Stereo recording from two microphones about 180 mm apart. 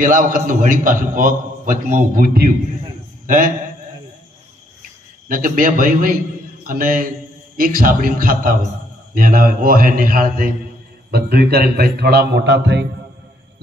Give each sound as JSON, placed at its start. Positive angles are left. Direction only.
{"t": 0.0, "sound": "a man's voice", "side_deg": -50}
{"t": 5.3, "sound": "a man's voice", "side_deg": -50}